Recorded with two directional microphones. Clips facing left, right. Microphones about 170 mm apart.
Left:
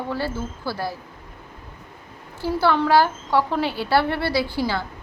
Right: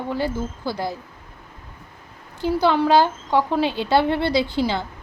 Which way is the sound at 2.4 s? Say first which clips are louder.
Right 2 dB; 15° right (ahead or behind).